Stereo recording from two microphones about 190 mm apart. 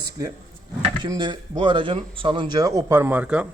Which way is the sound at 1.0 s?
25° right (ahead or behind).